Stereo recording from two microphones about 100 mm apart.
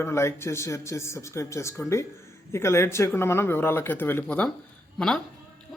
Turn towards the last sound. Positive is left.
turn(degrees=5)  # may be behind; listen again after turning